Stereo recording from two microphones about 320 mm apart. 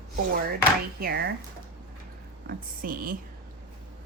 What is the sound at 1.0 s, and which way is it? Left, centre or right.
Speech, right.